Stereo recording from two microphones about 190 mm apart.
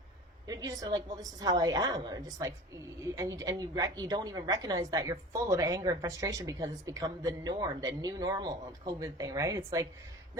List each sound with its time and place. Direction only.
0.4 s a woman's voice: 20° right (ahead or behind)